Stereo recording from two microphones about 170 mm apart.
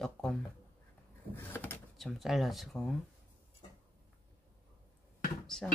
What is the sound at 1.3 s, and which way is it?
Vehicle, 10° left (ahead or behind).